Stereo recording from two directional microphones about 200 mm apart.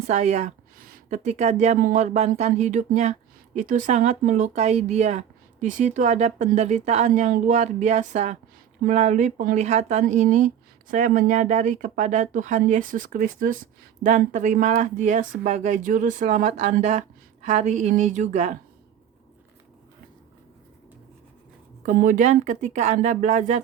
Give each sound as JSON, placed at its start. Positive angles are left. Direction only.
{"t": 0.1, "sound": "a woman's voice", "side_deg": -35}
{"t": 21.8, "sound": "a woman's voice", "side_deg": -40}